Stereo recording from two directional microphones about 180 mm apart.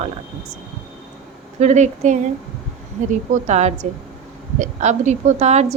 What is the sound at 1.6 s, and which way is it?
Speech, 40° right (ahead or behind).